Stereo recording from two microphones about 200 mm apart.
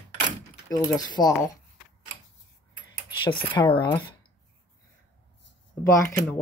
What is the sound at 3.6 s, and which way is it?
Speech, 25° left (ahead or behind).